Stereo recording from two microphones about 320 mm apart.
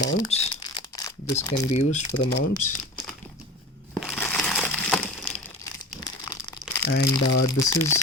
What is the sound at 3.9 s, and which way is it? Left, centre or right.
Crumpling, centre.